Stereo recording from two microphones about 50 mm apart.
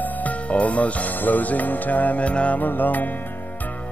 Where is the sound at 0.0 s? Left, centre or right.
Left.